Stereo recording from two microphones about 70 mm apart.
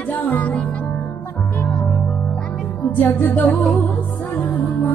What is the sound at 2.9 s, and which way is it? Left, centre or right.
Music, left.